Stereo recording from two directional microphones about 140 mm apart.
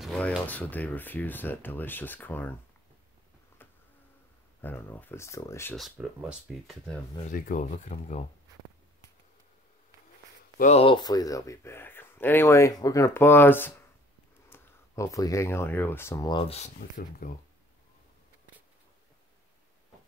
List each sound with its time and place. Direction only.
0.0 s a sound: 5° left (ahead or behind)
0.5 s speech: 10° left (ahead or behind)
4.6 s speech: 15° left (ahead or behind)
5.8 s speech: 5° right (ahead or behind)
7.2 s speech: 70° left (ahead or behind)
10.6 s speech: 45° left (ahead or behind)
11.0 s speech: 30° left (ahead or behind)
16.3 s speech: 35° left (ahead or behind)
16.5 s speech: 55° left (ahead or behind)
17.2 s speech: 90° left